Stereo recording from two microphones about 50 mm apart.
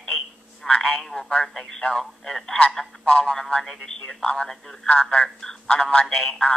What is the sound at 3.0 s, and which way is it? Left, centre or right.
Speech, left.